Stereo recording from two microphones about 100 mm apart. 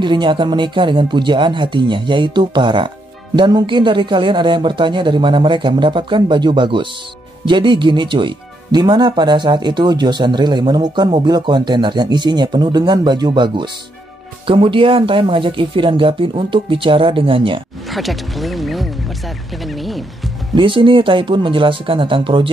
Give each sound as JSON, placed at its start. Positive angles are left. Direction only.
{"t": 0.0, "sound": "speech", "side_deg": -55}
{"t": 17.8, "sound": "speech", "side_deg": 0}
{"t": 19.6, "sound": "a sound", "side_deg": 0}
{"t": 20.5, "sound": "speech", "side_deg": -55}